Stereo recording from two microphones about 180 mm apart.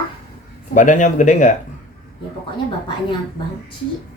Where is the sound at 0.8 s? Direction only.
45° left (ahead or behind).